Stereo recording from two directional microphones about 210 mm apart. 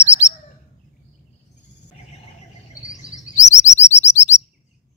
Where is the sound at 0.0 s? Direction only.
15° left (ahead or behind).